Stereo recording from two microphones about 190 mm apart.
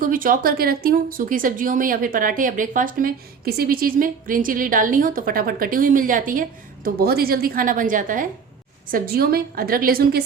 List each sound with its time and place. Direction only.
0.0 s speech: 45° right (ahead or behind)